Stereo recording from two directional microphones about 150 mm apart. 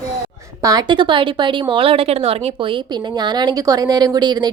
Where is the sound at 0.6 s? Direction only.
25° right (ahead or behind).